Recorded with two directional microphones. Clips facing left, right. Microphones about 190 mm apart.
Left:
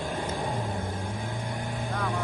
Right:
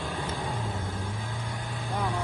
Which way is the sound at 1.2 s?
15° left (ahead or behind).